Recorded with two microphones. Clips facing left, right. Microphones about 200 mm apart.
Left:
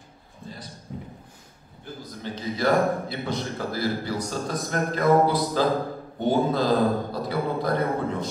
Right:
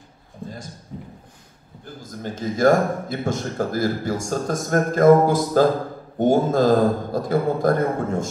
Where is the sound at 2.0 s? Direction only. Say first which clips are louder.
Right 5 dB; 45° right (ahead or behind).